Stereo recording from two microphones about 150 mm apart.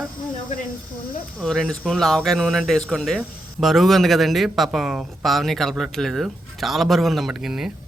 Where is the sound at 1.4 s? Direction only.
5° left (ahead or behind).